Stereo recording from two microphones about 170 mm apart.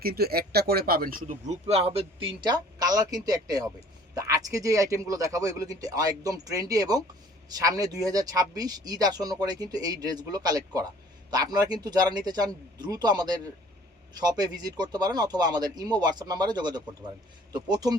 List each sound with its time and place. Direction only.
0.0 s speech: 65° right (ahead or behind); by 17.9 s 25° right (ahead or behind)